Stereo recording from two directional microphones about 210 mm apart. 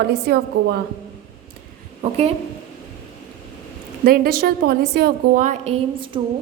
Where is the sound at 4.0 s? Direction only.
45° right (ahead or behind); by 6.2 s 25° right (ahead or behind).